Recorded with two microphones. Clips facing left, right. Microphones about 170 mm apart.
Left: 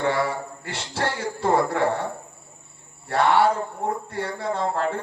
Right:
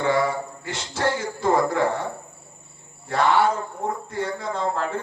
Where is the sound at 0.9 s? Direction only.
30° left (ahead or behind).